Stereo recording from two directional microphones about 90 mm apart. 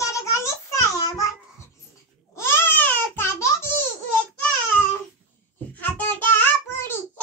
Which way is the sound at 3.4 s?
30° left (ahead or behind).